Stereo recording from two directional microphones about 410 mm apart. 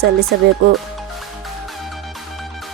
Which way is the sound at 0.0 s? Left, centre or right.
Right.